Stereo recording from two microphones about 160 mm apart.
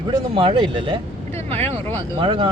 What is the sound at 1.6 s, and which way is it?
Speech, 15° left (ahead or behind).